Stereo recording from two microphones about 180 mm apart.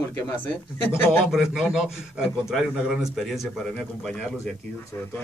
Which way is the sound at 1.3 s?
5° right (ahead or behind).